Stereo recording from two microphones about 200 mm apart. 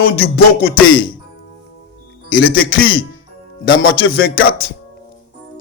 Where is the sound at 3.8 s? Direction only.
90° left.